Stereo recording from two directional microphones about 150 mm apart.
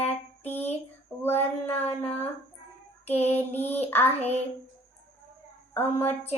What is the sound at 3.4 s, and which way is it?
Female singing, 15° left (ahead or behind).